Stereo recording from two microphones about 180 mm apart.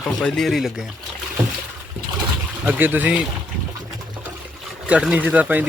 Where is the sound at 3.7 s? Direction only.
20° right (ahead or behind).